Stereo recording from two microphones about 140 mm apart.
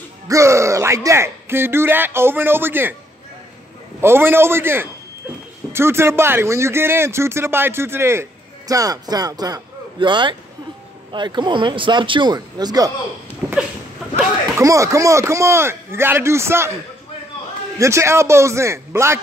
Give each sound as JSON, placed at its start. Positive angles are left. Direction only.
{"t": 0.3, "sound": "speech", "side_deg": -20}
{"t": 4.0, "sound": "a man's voice", "side_deg": -15}
{"t": 14.1, "sound": "speech", "side_deg": -20}
{"t": 17.7, "sound": "speech", "side_deg": -20}